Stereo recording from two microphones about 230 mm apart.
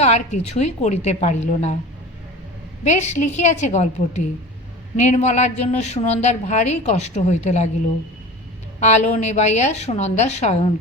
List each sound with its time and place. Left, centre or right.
0.0 s a woman's voice: left
2.8 s a woman's voice: left
8.8 s a woman's voice: left